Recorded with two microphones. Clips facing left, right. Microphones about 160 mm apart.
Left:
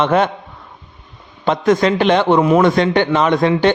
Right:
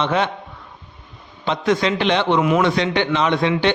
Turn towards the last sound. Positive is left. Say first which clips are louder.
# left 4 dB
turn(degrees=45)  # may be behind; listen again after turning